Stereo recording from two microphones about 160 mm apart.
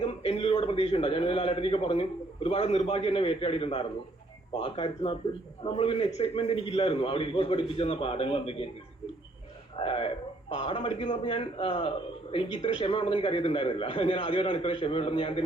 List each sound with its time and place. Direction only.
0.0 s a man's voice: 40° left (ahead or behind)
9.7 s a man's voice: 35° left (ahead or behind)
11.2 s a man's voice: 35° left (ahead or behind)